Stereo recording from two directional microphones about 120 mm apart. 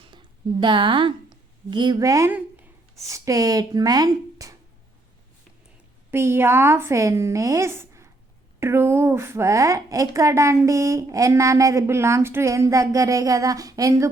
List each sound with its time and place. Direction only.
0.1 s a sound: 40° right (ahead or behind)
2.0 s a woman's voice: 25° right (ahead or behind)
6.1 s a woman's voice: 20° right (ahead or behind)